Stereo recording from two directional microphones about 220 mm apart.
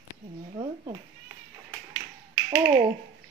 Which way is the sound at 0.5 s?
25° right (ahead or behind).